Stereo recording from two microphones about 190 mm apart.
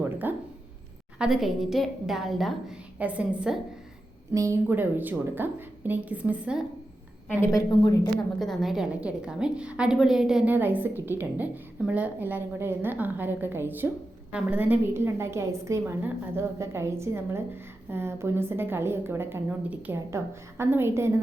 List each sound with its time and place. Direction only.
0.0 s a sound: 10° right (ahead or behind)
1.2 s a woman's voice: centre (ahead or behind)
7.3 s a woman's voice: 15° left (ahead or behind)
8.4 s a woman's voice: centre (ahead or behind)